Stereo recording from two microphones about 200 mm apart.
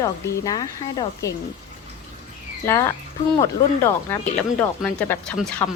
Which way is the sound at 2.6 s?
15° left (ahead or behind).